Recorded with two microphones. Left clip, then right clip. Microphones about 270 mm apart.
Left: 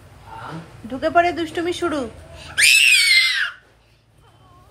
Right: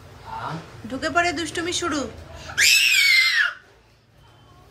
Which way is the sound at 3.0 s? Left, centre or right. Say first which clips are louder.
Left 1 dB; centre.